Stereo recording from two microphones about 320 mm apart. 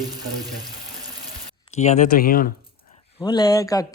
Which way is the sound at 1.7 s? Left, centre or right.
Left.